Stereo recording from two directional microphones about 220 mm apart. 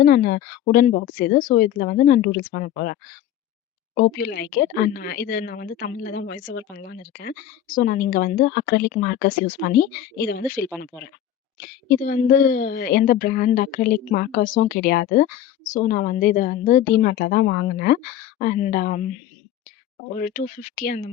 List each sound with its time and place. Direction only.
0.0 s a woman's voice: 40° left (ahead or behind)
20.1 s speech: 40° left (ahead or behind)